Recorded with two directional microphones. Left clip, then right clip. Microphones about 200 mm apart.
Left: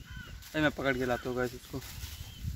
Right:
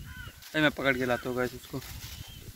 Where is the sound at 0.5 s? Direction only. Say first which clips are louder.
Right 4 dB; 5° right (ahead or behind).